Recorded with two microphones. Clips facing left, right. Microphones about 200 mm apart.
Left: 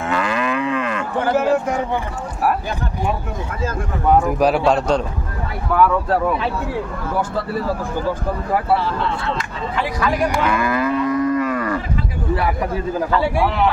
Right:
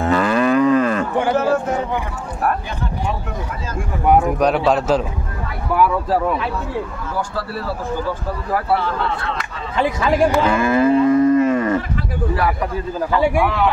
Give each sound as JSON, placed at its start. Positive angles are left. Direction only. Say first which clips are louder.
{"t": 0.0, "sound": "moo", "louder": "right 5 dB", "side_deg": -35}
{"t": 4.0, "sound": "speech", "louder": "right 1 dB", "side_deg": -10}
{"t": 4.3, "sound": "speech", "louder": "even", "side_deg": 0}
{"t": 9.8, "sound": "speech", "louder": "right 4 dB", "side_deg": -25}
{"t": 10.4, "sound": "moo", "louder": "right 4 dB", "side_deg": -25}
{"t": 13.1, "sound": "speech", "louder": "right 4 dB", "side_deg": -15}